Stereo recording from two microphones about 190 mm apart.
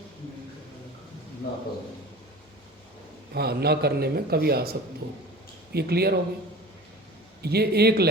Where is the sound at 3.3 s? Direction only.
55° right (ahead or behind).